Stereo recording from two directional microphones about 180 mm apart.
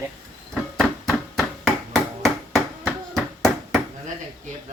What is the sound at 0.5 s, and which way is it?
Chop, centre (ahead or behind).